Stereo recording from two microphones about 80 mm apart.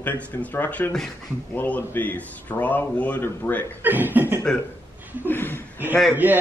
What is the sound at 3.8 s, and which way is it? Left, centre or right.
Speech, right.